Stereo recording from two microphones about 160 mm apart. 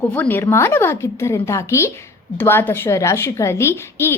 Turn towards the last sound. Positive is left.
turn(degrees=15)  # may be behind; listen again after turning